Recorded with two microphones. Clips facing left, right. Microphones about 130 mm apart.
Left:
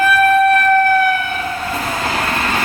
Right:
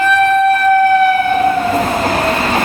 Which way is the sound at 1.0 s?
40° right (ahead or behind).